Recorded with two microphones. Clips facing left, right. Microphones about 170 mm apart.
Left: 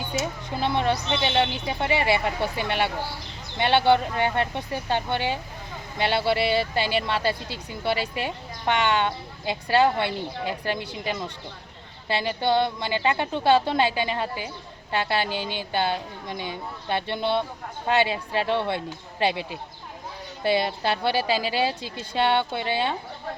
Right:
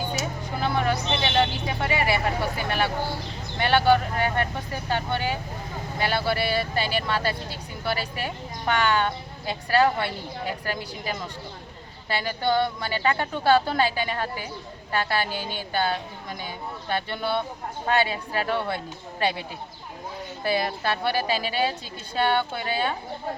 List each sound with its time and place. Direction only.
0.2 s a sound: 25° left (ahead or behind)
1.8 s a woman's voice: 25° left (ahead or behind)
16.9 s a woman's voice: 25° left (ahead or behind)
20.4 s a woman's voice: 25° left (ahead or behind)